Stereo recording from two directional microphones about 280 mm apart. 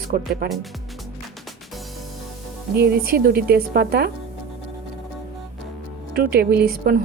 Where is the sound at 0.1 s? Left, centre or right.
Right.